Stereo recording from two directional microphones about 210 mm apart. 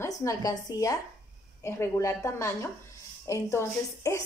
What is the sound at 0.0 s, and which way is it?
A woman's voice, 15° left (ahead or behind).